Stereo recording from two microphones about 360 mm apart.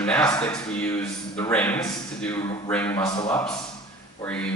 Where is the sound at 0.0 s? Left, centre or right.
Centre.